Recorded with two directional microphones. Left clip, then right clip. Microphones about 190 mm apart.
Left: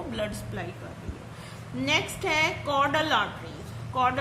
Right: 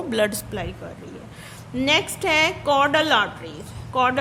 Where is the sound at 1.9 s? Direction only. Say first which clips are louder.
Right 6 dB; 50° right (ahead or behind).